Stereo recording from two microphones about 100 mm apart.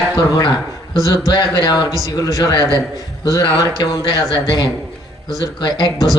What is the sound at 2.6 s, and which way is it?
Speech, 35° right (ahead or behind).